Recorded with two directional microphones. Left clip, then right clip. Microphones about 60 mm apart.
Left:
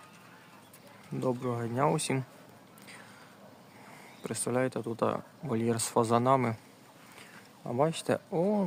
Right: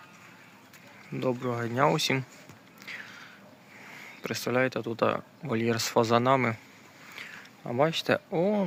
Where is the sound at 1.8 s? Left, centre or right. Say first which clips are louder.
Right 5 dB; centre.